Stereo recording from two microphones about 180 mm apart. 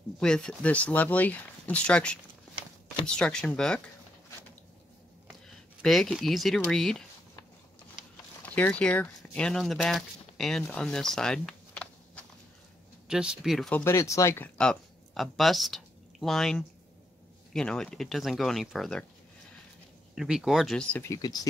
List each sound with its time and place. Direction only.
0.2 s speech: 5° left (ahead or behind)
3.2 s speech: 5° left (ahead or behind)
5.8 s speech: centre (ahead or behind)
8.4 s speech: 10° left (ahead or behind)
10.6 s a sound: 5° left (ahead or behind)
13.1 s speech: 5° right (ahead or behind)
20.2 s speech: centre (ahead or behind)
21.1 s speech: 20° left (ahead or behind)